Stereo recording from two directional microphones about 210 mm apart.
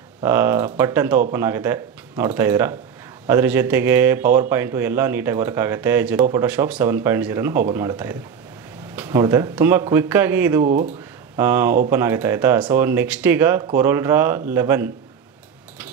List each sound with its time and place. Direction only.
0.2 s speech: 10° right (ahead or behind)
10.7 s speech: 40° right (ahead or behind)
11.3 s speech: 10° right (ahead or behind)